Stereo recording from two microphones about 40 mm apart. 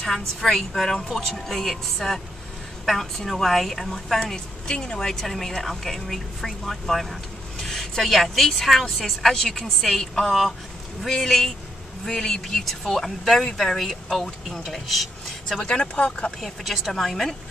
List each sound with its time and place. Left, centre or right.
0.0 s a woman's voice: centre; by 5.0 s left
5.0 s a woman's voice: centre
15.6 s speech: left
16.3 s speech: centre